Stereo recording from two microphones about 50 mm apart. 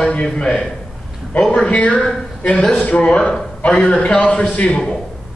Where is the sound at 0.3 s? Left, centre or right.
Centre.